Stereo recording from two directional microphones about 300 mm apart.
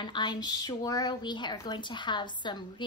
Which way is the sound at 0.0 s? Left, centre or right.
Centre.